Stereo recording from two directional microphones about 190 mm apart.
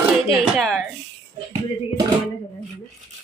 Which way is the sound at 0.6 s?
Centre (ahead or behind).